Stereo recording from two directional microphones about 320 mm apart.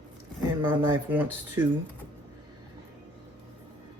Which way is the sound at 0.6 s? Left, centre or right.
Centre.